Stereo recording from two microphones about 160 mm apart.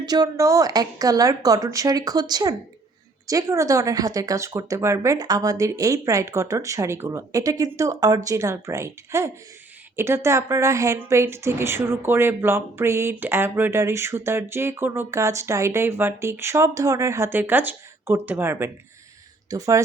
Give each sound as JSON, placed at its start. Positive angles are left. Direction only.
{"t": 0.0, "sound": "a woman's voice", "side_deg": -25}